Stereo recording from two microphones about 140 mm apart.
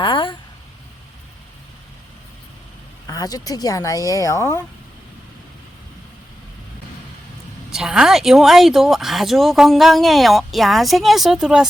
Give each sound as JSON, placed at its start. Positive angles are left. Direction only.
{"t": 0.0, "sound": "vehicle", "side_deg": 35}
{"t": 3.1, "sound": "speech", "side_deg": 25}
{"t": 7.7, "sound": "speech", "side_deg": -5}